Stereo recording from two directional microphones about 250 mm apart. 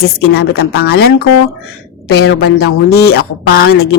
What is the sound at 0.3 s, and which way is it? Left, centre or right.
A woman's voice, left.